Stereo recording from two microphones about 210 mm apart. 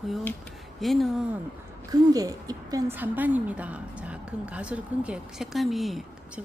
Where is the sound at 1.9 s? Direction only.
15° right (ahead or behind).